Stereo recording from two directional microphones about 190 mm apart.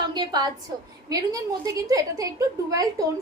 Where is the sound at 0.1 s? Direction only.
20° right (ahead or behind).